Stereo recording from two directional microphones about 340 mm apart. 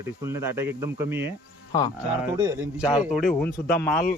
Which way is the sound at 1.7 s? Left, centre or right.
Centre.